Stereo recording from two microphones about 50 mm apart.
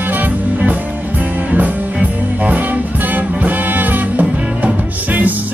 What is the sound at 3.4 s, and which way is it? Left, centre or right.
Music, right.